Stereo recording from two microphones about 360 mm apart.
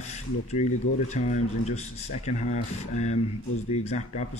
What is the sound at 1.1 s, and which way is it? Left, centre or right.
Speech, centre.